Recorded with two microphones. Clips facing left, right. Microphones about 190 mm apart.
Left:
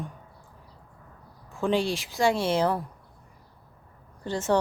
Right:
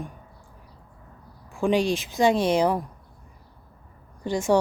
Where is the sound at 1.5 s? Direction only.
15° right (ahead or behind).